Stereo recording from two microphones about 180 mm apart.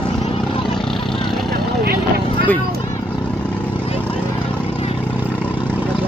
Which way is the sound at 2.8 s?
15° left (ahead or behind).